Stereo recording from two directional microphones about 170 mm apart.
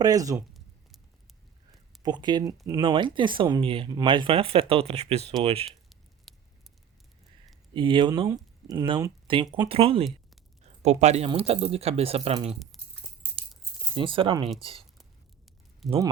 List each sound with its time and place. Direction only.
0.0 s speech: 20° right (ahead or behind)
2.0 s speech: 25° right (ahead or behind)
6.3 s a sound: centre (ahead or behind)
7.7 s speech: 30° right (ahead or behind)
13.9 s speech: 30° right (ahead or behind)
15.8 s speech: centre (ahead or behind)